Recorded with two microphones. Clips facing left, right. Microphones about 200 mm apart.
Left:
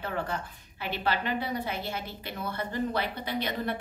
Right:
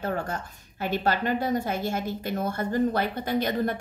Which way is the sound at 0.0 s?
45° right (ahead or behind).